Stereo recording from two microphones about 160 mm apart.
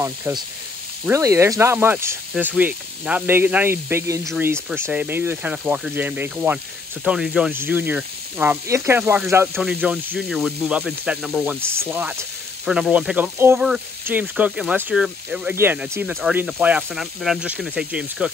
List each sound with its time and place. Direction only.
1.0 s speech: 20° right (ahead or behind)